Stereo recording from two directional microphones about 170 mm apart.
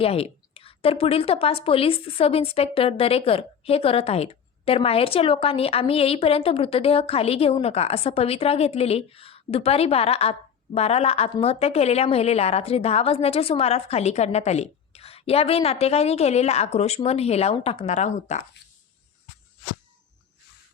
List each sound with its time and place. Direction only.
0.0 s a woman's voice: 35° left (ahead or behind)